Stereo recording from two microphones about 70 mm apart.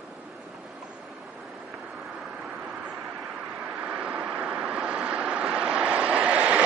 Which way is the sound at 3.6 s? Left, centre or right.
Centre.